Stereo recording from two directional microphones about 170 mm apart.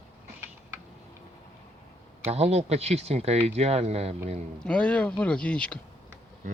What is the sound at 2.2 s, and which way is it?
Speech, 40° right (ahead or behind).